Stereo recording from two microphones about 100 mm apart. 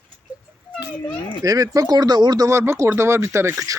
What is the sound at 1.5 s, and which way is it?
Speech, 35° right (ahead or behind).